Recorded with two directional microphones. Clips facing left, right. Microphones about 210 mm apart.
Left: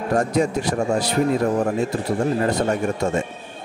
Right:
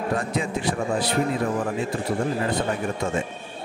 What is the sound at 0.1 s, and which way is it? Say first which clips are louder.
A man's voice: left 9 dB; 45° left (ahead or behind).